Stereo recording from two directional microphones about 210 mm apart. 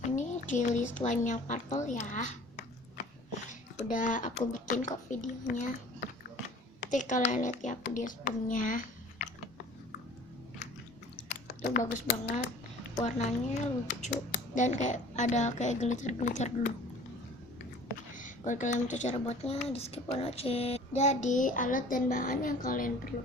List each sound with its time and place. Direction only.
0.0 s a woman's voice: 35° left (ahead or behind)
3.8 s speech: 40° left (ahead or behind)
6.9 s speech: 35° left (ahead or behind)
11.2 s chewing: 35° left (ahead or behind)
11.6 s a woman's voice: 45° left (ahead or behind)
13.0 s speech: 35° left (ahead or behind)
18.1 s speech: 35° left (ahead or behind)